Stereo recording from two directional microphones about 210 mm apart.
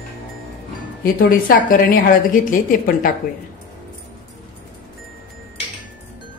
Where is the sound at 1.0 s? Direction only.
45° left (ahead or behind).